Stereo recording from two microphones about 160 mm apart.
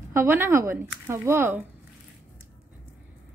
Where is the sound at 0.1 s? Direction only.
15° right (ahead or behind).